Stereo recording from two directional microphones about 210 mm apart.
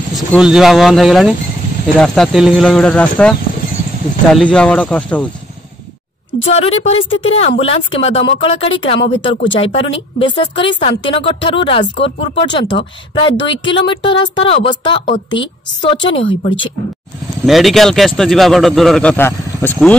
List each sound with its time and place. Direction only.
0.1 s a man's voice: centre (ahead or behind)
6.4 s a woman's voice: 30° left (ahead or behind)
17.5 s a man's voice: centre (ahead or behind)